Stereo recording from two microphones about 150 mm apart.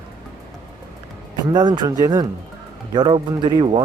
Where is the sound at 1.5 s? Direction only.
30° right (ahead or behind).